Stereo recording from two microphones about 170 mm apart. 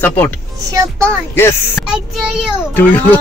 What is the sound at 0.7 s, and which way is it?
Speech, 20° right (ahead or behind).